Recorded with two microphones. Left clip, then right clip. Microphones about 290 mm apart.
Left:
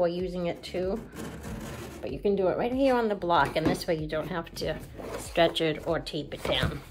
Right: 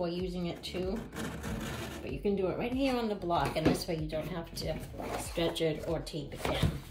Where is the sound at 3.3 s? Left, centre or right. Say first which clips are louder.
Left 8 dB; left.